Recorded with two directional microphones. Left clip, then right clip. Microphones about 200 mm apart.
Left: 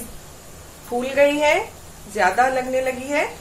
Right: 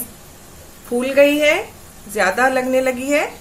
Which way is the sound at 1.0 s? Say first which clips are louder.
Right 4 dB; 50° right (ahead or behind).